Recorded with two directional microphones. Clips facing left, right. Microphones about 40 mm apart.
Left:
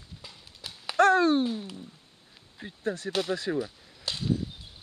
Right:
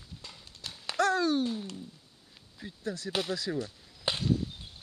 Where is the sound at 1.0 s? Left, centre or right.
Left.